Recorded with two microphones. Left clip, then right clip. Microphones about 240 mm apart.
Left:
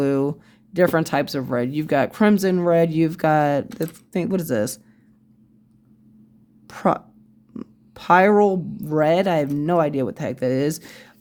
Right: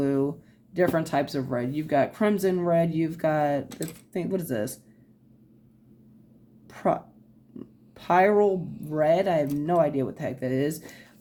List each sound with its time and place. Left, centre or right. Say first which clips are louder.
0.0 s speech: left 5 dB; left
6.7 s speech: left 5 dB; left